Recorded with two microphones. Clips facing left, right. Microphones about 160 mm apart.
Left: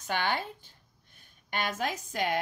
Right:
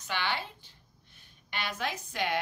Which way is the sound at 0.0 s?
45° left (ahead or behind).